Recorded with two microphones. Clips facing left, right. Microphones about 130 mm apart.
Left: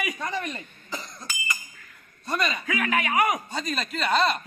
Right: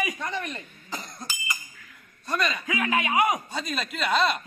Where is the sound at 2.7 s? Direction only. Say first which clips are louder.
Even; 20° right (ahead or behind).